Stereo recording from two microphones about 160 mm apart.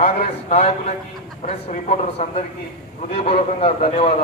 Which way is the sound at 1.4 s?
45° left (ahead or behind).